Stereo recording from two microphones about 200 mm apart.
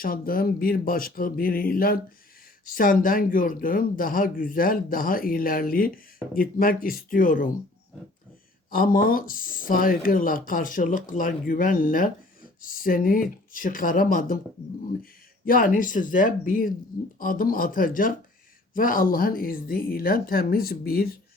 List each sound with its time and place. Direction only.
0.0 s speech: 45° left (ahead or behind)
8.7 s speech: 45° left (ahead or behind)
15.4 s speech: 45° left (ahead or behind)